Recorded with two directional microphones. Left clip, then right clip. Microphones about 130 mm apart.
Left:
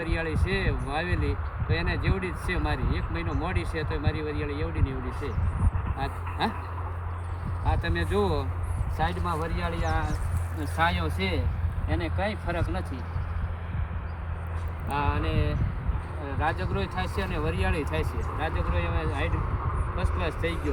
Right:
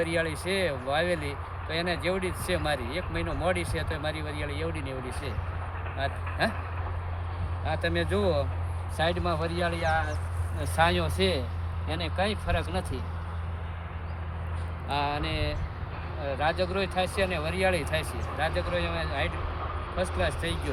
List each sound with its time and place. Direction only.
0.0 s speech: 35° right (ahead or behind)
7.6 s speech: 35° right (ahead or behind)
9.8 s speech: 50° right (ahead or behind)
10.8 s speech: 70° right (ahead or behind)
11.9 s speech: 90° right; by 12.8 s 60° right (ahead or behind)
14.8 s a sound: 25° right (ahead or behind)
16.4 s speech: 30° right (ahead or behind)